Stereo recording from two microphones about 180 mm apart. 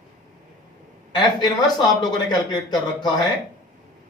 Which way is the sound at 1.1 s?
25° left (ahead or behind).